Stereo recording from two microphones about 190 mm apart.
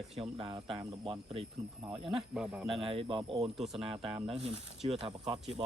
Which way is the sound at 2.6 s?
30° right (ahead or behind).